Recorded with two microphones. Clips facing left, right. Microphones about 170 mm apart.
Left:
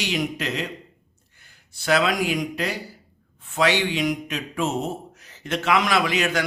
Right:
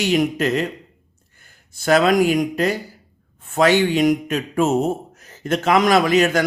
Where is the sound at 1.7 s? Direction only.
45° right (ahead or behind).